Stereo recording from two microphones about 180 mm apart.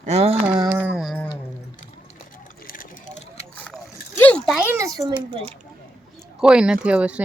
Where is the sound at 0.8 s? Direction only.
5° right (ahead or behind).